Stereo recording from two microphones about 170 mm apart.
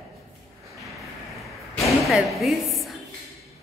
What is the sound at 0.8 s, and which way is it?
Arrow, centre (ahead or behind).